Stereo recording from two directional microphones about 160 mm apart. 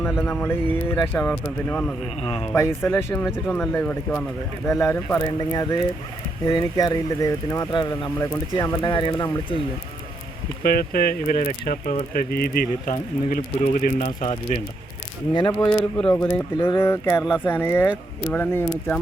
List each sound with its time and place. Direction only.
0.2 s speech: 15° left (ahead or behind)
2.2 s speech: 35° left (ahead or behind)
2.5 s speech: 15° left (ahead or behind)
4.7 s speech: 20° left (ahead or behind)
10.6 s speech: 70° left (ahead or behind); by 14.6 s 50° left (ahead or behind)
15.3 s speech: 30° left (ahead or behind)
15.8 s speech: 5° left (ahead or behind)
16.6 s speech: 30° left (ahead or behind)
16.8 s speech: 15° left (ahead or behind)